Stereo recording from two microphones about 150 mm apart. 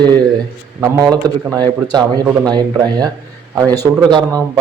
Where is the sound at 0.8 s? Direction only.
25° right (ahead or behind).